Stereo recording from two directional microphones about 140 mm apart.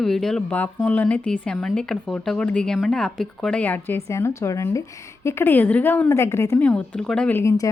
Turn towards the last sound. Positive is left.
turn(degrees=20)  # may be behind; listen again after turning